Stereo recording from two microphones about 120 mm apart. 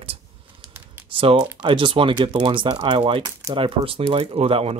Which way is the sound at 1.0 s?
45° right (ahead or behind).